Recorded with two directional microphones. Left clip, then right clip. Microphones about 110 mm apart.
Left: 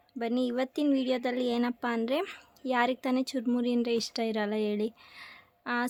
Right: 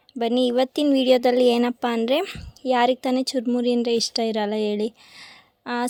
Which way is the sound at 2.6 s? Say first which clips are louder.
Right 9 dB; 40° right (ahead or behind).